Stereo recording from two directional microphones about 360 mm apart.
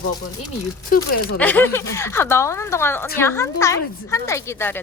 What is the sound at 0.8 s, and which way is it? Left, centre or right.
Speech, left.